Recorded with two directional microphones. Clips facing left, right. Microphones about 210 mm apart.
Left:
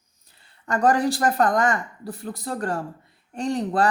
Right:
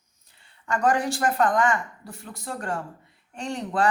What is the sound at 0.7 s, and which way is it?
Speech, 35° left (ahead or behind).